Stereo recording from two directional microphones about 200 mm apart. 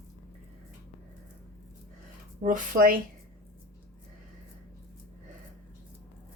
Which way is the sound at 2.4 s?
40° right (ahead or behind).